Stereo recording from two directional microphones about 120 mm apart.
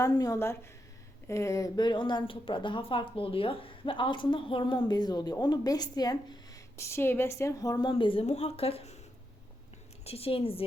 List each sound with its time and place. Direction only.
0.0 s a woman's voice: 30° left (ahead or behind)
7.9 s a woman's voice: 45° left (ahead or behind)
8.2 s speech: 60° left (ahead or behind)
10.0 s a woman's voice: 55° left (ahead or behind)